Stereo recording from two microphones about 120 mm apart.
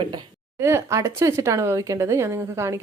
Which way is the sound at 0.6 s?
20° right (ahead or behind).